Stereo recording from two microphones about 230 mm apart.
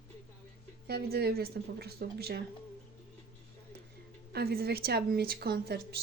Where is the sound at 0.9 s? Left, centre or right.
Right.